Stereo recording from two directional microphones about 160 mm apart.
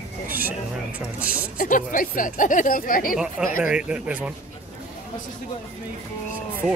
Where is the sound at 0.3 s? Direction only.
10° right (ahead or behind).